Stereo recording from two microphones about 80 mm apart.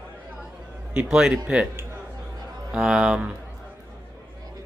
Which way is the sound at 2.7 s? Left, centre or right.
Centre.